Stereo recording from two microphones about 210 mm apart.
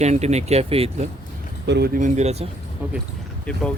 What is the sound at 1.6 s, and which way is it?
Speech, 50° right (ahead or behind).